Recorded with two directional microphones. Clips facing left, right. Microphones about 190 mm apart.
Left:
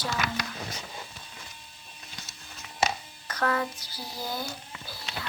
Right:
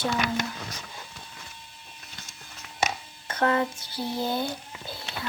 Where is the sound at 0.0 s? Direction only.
20° right (ahead or behind).